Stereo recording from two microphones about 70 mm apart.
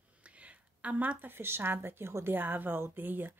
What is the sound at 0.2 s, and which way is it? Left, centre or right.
Speech, centre.